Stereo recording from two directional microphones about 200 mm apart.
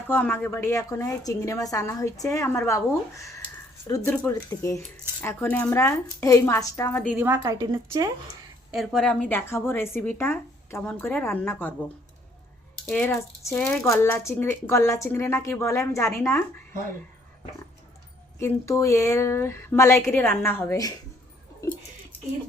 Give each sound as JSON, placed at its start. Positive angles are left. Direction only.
{"t": 0.1, "sound": "a woman's voice", "side_deg": 10}
{"t": 7.1, "sound": "a woman's voice", "side_deg": -10}
{"t": 8.7, "sound": "a woman's voice", "side_deg": 0}
{"t": 12.9, "sound": "a woman's voice", "side_deg": 10}
{"t": 18.3, "sound": "a woman's voice", "side_deg": 15}
{"t": 21.6, "sound": "a sound", "side_deg": 15}